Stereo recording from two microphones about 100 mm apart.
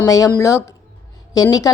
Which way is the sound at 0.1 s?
35° left (ahead or behind).